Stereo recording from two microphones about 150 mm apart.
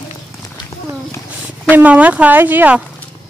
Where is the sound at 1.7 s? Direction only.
10° right (ahead or behind).